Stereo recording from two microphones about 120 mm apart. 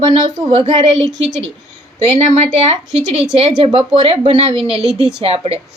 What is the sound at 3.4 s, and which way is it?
A woman's voice, 50° right (ahead or behind).